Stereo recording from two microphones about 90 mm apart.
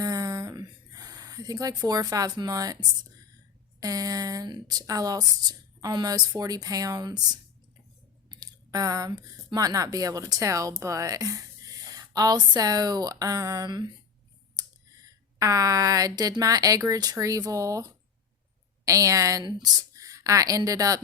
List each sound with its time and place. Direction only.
0.0 s a sound: 40° right (ahead or behind)
3.8 s speech: 40° right (ahead or behind)
15.0 s speech: 40° right (ahead or behind)